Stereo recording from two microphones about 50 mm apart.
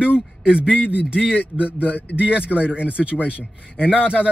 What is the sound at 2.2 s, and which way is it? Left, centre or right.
Speech, right.